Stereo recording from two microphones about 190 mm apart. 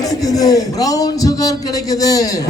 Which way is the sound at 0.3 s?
20° left (ahead or behind).